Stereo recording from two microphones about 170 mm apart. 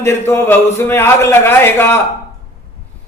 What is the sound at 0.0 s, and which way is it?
A man's voice, 15° left (ahead or behind).